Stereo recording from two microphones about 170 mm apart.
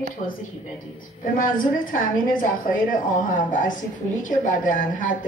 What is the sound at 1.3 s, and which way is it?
Speech, 55° left (ahead or behind).